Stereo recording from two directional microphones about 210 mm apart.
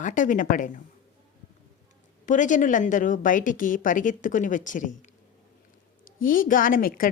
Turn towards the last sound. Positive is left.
turn(degrees=40)  # may be behind; listen again after turning